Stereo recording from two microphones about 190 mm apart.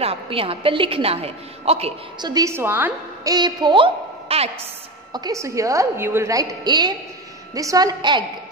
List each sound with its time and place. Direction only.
0.0 s a woman's voice: 30° right (ahead or behind)
2.3 s a woman's voice: 15° right (ahead or behind)
3.3 s a woman's voice: 25° right (ahead or behind)
5.1 s a woman's voice: 20° right (ahead or behind)